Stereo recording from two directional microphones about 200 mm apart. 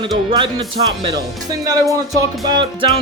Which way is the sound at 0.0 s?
25° right (ahead or behind).